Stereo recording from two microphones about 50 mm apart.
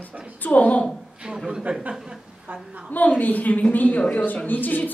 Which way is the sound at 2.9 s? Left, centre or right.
Left.